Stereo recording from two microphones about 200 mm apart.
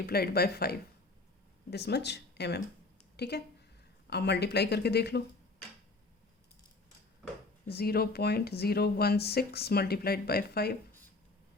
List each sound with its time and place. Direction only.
0.0 s speech: 50° left (ahead or behind)
7.7 s speech: 50° left (ahead or behind)